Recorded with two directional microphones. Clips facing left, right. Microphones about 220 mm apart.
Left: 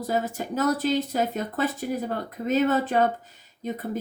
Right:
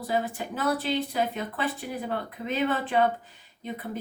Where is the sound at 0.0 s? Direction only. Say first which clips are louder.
Left 2 dB; 40° left (ahead or behind).